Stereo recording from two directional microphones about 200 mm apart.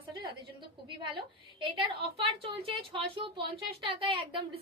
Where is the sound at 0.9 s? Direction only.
25° right (ahead or behind).